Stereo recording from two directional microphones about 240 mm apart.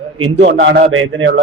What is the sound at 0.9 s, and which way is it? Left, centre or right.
Speech, right.